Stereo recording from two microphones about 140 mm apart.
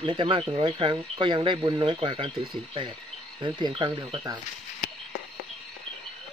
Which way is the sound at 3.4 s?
35° right (ahead or behind).